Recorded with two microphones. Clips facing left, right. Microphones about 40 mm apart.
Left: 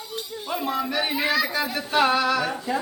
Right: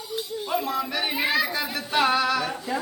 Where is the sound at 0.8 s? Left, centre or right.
Centre.